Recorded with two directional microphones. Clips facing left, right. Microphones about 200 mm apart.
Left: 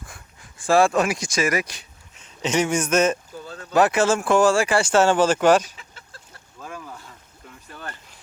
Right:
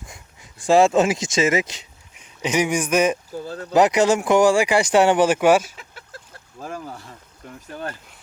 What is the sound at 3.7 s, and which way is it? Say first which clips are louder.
Speech: right 2 dB; 20° right (ahead or behind).